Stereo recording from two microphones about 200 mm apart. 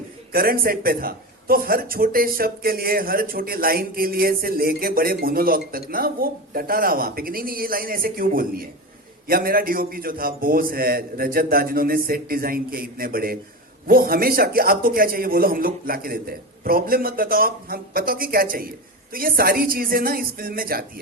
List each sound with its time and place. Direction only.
0.3 s a man's voice: 50° right (ahead or behind)